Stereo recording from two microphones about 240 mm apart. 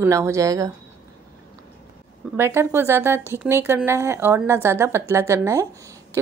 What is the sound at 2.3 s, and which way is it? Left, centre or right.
A woman's voice, centre.